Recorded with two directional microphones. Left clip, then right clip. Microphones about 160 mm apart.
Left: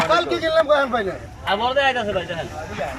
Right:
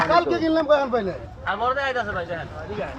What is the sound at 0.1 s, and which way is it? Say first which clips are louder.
Speech: left 1 dB; 15° right (ahead or behind).